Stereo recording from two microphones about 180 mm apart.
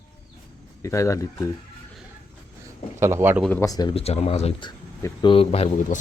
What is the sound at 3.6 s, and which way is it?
Speech, 20° left (ahead or behind).